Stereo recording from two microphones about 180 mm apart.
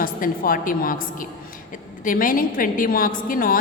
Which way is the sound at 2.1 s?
50° left (ahead or behind).